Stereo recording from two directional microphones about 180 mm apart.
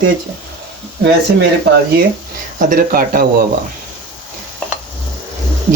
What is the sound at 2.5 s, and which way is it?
Speech, 50° right (ahead or behind).